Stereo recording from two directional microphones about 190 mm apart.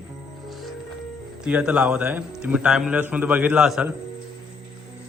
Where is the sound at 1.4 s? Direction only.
5° right (ahead or behind).